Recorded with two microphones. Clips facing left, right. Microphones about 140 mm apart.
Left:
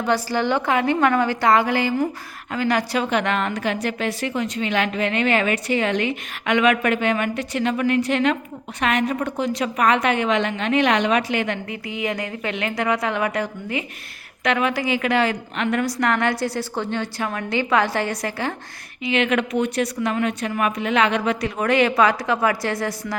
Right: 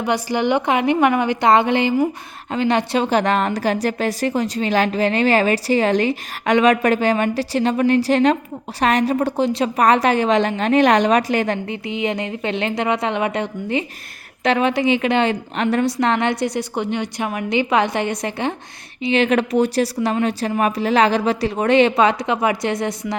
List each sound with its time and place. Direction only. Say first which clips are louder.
0.0 s a woman's voice: right 2 dB; 15° right (ahead or behind)
19.0 s a woman's voice: right 4 dB; 30° right (ahead or behind)